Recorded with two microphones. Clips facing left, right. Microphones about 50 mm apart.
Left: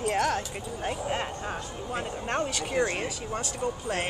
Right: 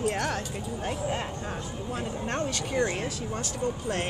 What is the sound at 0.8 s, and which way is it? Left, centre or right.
Speech, centre.